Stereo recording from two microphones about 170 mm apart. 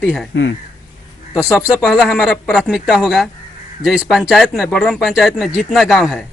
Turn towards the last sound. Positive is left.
turn(degrees=0)  # may be behind; listen again after turning